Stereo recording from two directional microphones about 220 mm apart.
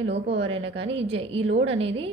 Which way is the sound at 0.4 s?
25° right (ahead or behind).